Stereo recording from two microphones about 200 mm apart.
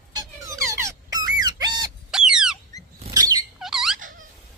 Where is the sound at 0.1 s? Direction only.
15° right (ahead or behind).